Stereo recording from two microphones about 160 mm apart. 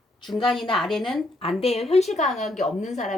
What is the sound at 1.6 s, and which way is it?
A woman's voice, 40° left (ahead or behind).